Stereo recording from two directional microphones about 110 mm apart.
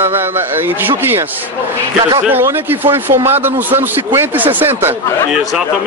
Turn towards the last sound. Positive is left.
turn(degrees=-20)  # may be behind; listen again after turning